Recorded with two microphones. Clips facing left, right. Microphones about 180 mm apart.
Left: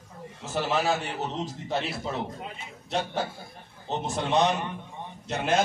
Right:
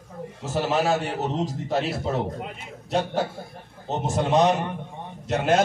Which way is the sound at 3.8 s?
45° right (ahead or behind).